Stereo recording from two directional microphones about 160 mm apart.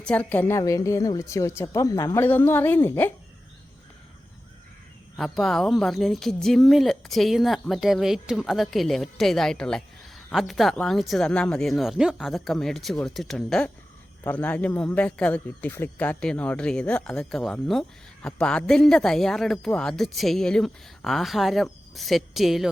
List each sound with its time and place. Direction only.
0.0 s a woman's voice: 10° left (ahead or behind)
5.1 s speech: centre (ahead or behind)